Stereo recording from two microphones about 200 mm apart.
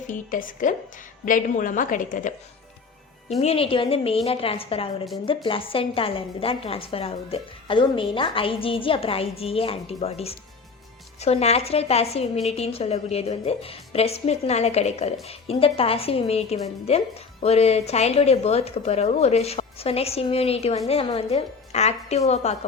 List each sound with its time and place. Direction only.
0.1 s a woman's voice: 40° left (ahead or behind)
3.4 s a woman's voice: 30° left (ahead or behind)